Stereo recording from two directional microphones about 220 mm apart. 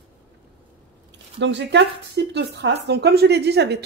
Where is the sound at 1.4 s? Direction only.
55° right (ahead or behind).